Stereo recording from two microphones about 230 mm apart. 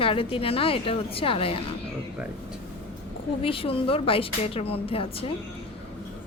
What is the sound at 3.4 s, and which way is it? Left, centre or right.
Speech, left.